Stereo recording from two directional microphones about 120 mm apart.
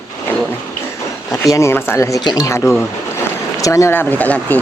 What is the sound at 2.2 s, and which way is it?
Speech, 40° left (ahead or behind).